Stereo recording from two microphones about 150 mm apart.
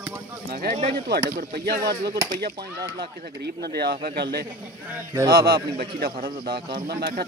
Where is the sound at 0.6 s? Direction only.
90° right.